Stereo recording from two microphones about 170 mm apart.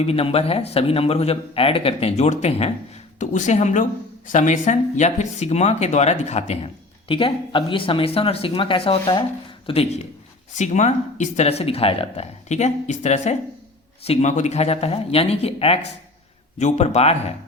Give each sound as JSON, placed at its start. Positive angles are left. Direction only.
{"t": 0.0, "sound": "a man's voice", "side_deg": 35}